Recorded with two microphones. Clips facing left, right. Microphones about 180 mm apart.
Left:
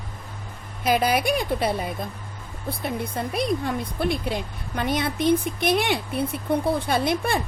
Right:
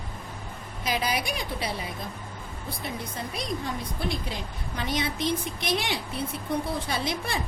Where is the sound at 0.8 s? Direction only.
55° left (ahead or behind).